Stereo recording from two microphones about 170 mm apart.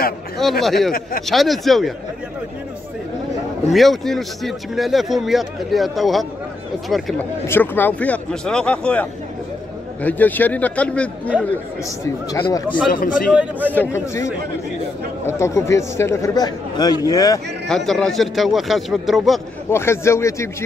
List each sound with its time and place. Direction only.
0.4 s speech: centre (ahead or behind)
3.7 s speech: centre (ahead or behind)
7.4 s speech: 10° left (ahead or behind)
10.0 s speech: 10° left (ahead or behind)
12.4 s speech: 30° left (ahead or behind)
12.9 s speech: 55° left (ahead or behind)
13.3 s speech: 5° right (ahead or behind)
13.7 s speech: 10° left (ahead or behind)
17.6 s speech: centre (ahead or behind)
19.7 s speech: 15° left (ahead or behind)